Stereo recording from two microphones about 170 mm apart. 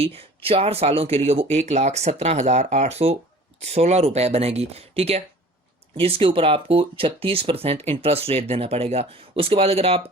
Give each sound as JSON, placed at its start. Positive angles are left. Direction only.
{"t": 0.0, "sound": "speech", "side_deg": -35}